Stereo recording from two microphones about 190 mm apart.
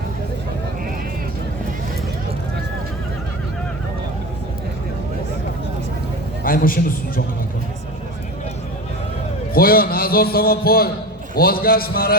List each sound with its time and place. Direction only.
6.4 s a man's voice: 50° left (ahead or behind)
9.5 s a man's voice: 50° left (ahead or behind)